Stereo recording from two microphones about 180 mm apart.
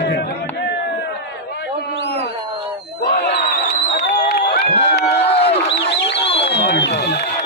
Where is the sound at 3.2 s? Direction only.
70° left (ahead or behind).